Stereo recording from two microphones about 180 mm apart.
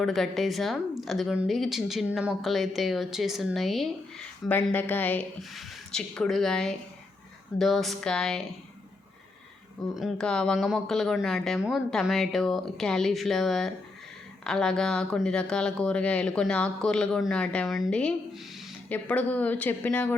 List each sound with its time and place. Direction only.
0.0 s speech: centre (ahead or behind)
9.9 s speech: centre (ahead or behind)